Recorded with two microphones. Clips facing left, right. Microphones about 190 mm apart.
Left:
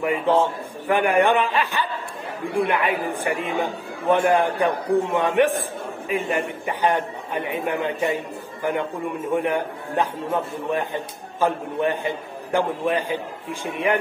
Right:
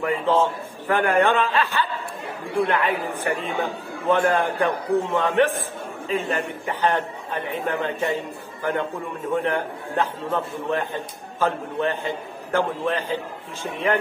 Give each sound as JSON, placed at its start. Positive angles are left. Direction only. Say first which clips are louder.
{"t": 0.0, "sound": "a man's voice", "louder": "left 1 dB", "side_deg": 15}
{"t": 9.3, "sound": "a man's voice", "louder": "even", "side_deg": 15}